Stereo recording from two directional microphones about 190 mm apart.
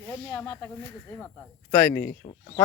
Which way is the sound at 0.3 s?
10° left (ahead or behind).